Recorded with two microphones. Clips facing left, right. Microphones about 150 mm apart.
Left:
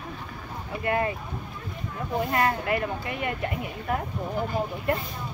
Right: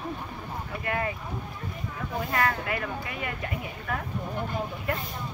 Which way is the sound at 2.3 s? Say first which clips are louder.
Left 2 dB; 25° left (ahead or behind).